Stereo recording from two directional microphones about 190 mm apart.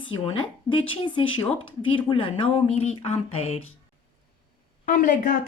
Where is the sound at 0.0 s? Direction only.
25° left (ahead or behind).